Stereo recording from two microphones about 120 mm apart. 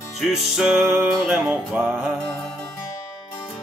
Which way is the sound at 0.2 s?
5° right (ahead or behind).